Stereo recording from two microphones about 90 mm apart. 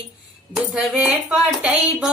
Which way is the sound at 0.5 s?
10° right (ahead or behind).